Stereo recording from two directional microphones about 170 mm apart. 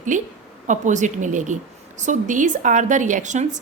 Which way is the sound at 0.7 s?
45° right (ahead or behind).